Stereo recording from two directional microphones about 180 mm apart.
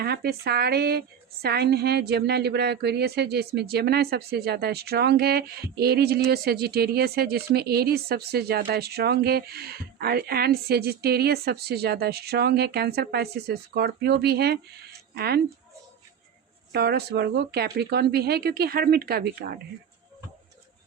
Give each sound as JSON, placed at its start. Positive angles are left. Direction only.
{"t": 0.0, "sound": "a woman's voice", "side_deg": -60}
{"t": 16.7, "sound": "a woman's voice", "side_deg": -65}